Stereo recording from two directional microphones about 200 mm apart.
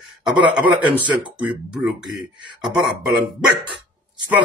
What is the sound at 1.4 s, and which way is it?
Speech, 5° right (ahead or behind).